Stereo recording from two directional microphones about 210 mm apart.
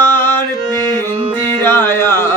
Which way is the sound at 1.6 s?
10° left (ahead or behind).